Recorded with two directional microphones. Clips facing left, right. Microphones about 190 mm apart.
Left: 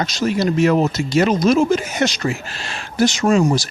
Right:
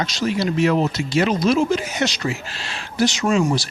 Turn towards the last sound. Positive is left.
turn(degrees=40)  # may be behind; listen again after turning